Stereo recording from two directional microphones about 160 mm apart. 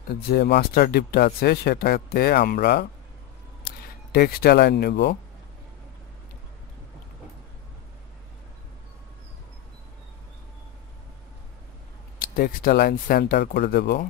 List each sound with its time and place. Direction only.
0.3 s speech: 80° left
12.2 s speech: 60° left (ahead or behind); by 14.0 s 80° left